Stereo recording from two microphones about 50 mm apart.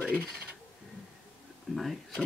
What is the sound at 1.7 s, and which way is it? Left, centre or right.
Speech, centre.